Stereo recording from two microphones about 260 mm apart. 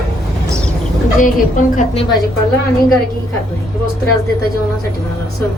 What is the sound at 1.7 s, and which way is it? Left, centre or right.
Speech, left.